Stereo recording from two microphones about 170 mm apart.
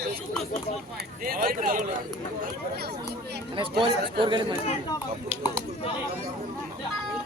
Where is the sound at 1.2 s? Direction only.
55° right (ahead or behind).